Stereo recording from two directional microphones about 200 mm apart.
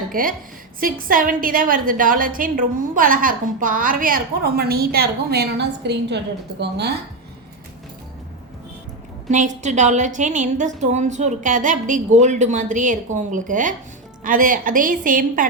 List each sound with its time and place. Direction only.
0.1 s a woman's voice: 45° right (ahead or behind)
9.3 s a woman's voice: 35° right (ahead or behind)